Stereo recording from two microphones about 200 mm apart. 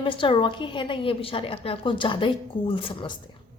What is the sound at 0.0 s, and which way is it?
A woman's voice, 25° left (ahead or behind).